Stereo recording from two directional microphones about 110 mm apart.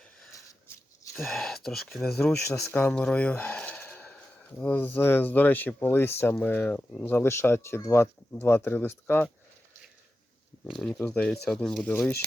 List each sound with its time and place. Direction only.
1.1 s speech: centre (ahead or behind); by 9.3 s 20° left (ahead or behind)
10.7 s speech: 5° left (ahead or behind)